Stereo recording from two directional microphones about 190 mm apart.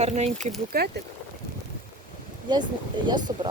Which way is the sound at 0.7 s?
55° right (ahead or behind).